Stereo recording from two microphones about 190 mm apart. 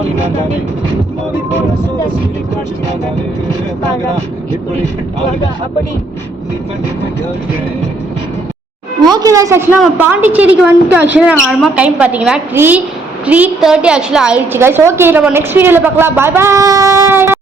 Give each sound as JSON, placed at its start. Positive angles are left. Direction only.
{"t": 9.0, "sound": "a woman's voice", "side_deg": -20}